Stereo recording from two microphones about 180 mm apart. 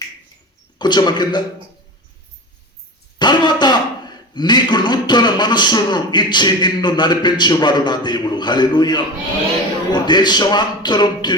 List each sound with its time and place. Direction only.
0.8 s a man's voice: 25° left (ahead or behind)
3.2 s a man's voice: 25° left (ahead or behind)